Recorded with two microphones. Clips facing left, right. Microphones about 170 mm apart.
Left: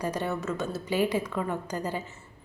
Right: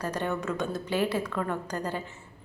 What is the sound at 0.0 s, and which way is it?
A woman's voice, 10° left (ahead or behind).